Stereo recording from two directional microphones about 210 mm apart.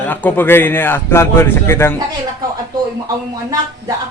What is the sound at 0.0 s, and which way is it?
A man's voice, 10° left (ahead or behind).